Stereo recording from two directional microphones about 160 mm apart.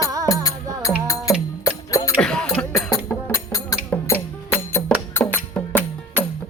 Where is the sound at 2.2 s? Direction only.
5° left (ahead or behind).